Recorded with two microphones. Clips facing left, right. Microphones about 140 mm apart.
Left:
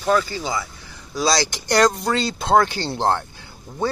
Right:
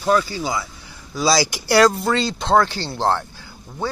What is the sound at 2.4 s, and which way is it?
Speech, 15° left (ahead or behind).